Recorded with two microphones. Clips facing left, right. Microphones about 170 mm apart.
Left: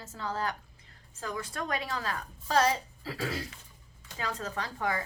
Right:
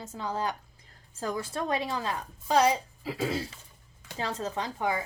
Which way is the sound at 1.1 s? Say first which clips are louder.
Right 4 dB; 30° right (ahead or behind).